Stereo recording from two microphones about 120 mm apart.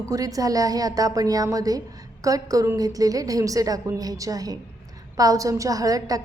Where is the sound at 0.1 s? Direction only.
30° right (ahead or behind).